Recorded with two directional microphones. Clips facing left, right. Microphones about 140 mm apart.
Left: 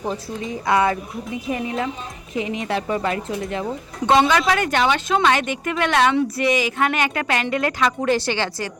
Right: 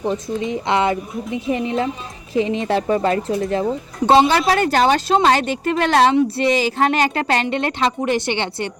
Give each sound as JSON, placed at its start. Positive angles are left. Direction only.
{"t": 0.4, "sound": "a woman's voice", "side_deg": -25}